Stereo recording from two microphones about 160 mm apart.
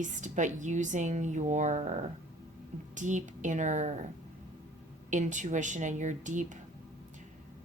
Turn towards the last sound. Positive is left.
turn(degrees=-50)  # may be behind; listen again after turning